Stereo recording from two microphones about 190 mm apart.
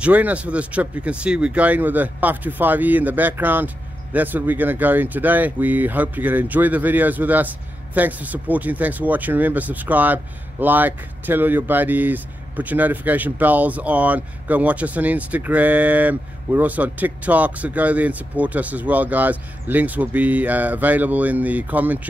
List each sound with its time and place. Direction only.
0.0 s speech: 5° right (ahead or behind)